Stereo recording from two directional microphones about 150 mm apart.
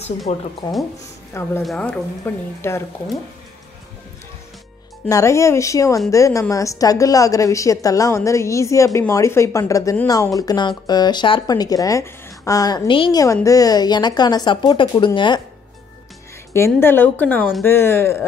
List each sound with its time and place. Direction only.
0.3 s speech: 45° left (ahead or behind)
1.6 s speech: 5° left (ahead or behind)
5.0 s a woman's voice: 20° left (ahead or behind)
13.2 s a woman's voice: 20° left (ahead or behind)
16.5 s speech: 15° left (ahead or behind)